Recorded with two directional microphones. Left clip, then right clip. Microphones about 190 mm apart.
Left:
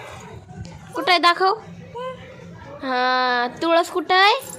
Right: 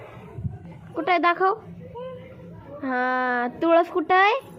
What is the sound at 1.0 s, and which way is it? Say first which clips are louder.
Speech: left 4 dB; 10° left (ahead or behind).